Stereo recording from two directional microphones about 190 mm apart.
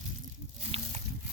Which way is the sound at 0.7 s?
30° right (ahead or behind).